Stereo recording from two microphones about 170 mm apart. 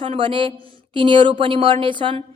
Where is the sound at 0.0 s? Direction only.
30° right (ahead or behind).